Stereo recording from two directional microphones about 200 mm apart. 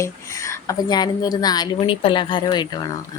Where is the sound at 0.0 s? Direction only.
15° left (ahead or behind).